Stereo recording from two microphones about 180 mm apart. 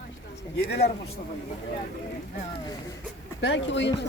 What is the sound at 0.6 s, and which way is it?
Speech, 60° left (ahead or behind).